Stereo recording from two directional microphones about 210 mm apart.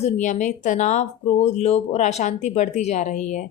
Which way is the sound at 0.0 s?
35° left (ahead or behind).